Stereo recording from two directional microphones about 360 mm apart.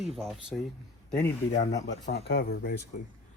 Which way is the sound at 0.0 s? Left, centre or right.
Centre.